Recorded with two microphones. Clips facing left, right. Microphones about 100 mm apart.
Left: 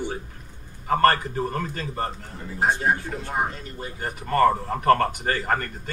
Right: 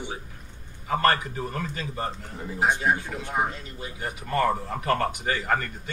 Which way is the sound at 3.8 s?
40° left (ahead or behind).